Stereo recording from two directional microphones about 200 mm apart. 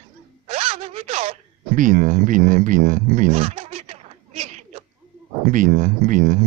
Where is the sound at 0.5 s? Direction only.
30° right (ahead or behind).